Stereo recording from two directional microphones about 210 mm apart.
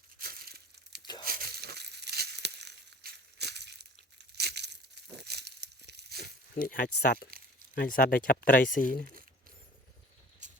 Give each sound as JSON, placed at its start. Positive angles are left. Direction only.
{"t": 0.2, "sound": "crumpling", "side_deg": -45}
{"t": 1.2, "sound": "a sound", "side_deg": -45}
{"t": 6.6, "sound": "speech", "side_deg": 40}